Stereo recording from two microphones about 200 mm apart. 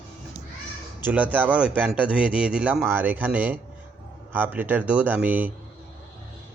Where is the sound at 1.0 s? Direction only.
10° right (ahead or behind).